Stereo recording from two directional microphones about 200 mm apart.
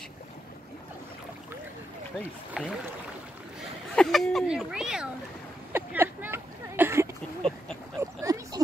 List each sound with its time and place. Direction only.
2.6 s speech: 5° right (ahead or behind)
3.9 s speech: centre (ahead or behind)
5.7 s a sound: 10° right (ahead or behind)